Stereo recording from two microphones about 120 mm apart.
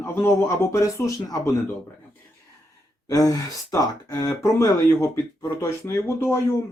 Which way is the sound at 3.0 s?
30° left (ahead or behind).